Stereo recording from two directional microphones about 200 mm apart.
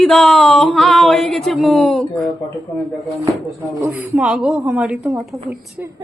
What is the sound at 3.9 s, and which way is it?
Speech, 5° right (ahead or behind).